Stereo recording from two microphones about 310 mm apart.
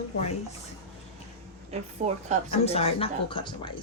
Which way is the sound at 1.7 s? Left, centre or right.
Right.